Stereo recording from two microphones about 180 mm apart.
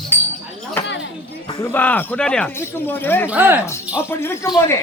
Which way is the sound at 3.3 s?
10° right (ahead or behind).